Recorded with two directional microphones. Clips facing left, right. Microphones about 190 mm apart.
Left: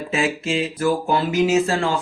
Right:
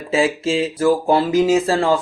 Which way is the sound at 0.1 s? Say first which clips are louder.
Right 5 dB; 30° right (ahead or behind).